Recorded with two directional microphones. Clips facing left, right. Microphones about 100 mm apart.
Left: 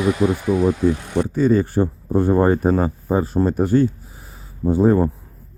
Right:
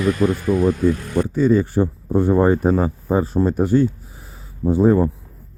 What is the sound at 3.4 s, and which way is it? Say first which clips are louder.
Speech: even; 25° left (ahead or behind).